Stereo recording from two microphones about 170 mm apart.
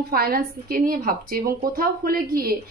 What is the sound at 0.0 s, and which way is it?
Speech, 60° right (ahead or behind).